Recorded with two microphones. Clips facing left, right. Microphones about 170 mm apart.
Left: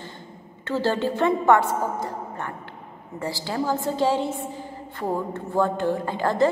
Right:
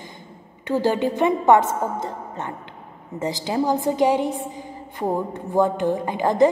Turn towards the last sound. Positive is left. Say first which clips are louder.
# right 4 dB
turn(degrees=-15)  # may be behind; listen again after turning